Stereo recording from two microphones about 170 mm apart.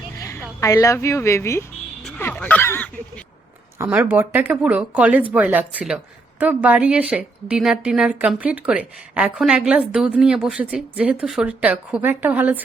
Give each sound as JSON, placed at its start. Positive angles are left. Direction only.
{"t": 0.2, "sound": "a sound", "side_deg": 20}
{"t": 0.6, "sound": "speech", "side_deg": 20}
{"t": 3.8, "sound": "speech", "side_deg": -15}